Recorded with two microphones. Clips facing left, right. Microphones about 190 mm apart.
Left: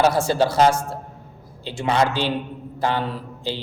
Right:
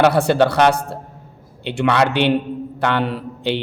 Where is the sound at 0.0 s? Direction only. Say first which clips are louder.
Right 4 dB; 65° right (ahead or behind).